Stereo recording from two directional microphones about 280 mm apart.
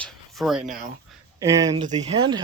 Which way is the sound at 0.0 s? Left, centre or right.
Centre.